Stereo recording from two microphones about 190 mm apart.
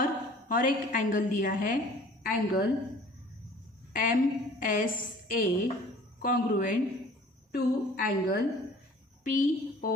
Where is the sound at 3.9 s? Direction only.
45° left (ahead or behind).